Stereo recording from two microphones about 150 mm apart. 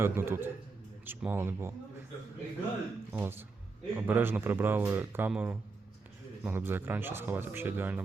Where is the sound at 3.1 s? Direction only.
15° right (ahead or behind).